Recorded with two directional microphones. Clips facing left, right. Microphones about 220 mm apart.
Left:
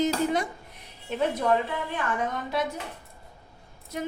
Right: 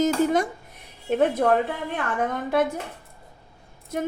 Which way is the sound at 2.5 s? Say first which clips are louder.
Right 8 dB; 50° right (ahead or behind).